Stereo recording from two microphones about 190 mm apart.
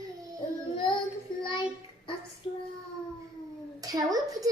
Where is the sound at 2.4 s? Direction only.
30° left (ahead or behind).